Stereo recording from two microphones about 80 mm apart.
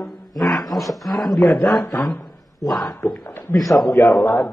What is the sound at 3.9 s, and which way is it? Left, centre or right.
Speech, left.